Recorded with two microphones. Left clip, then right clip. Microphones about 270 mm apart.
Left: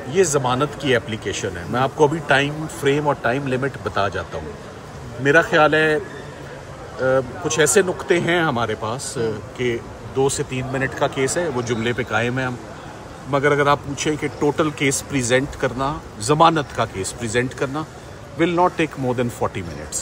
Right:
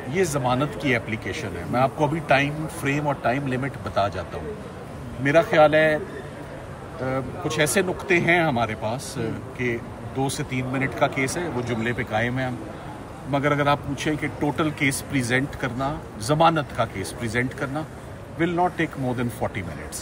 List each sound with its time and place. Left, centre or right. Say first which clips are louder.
0.5 s a man's voice: left 4 dB; centre
5.2 s a man's voice: left 2 dB; centre
7.4 s a man's voice: left 4 dB; centre